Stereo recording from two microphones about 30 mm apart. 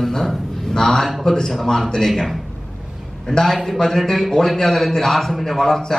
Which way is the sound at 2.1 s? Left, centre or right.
Centre.